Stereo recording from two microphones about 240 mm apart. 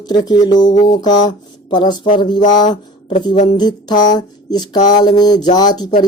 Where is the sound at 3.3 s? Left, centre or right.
Left.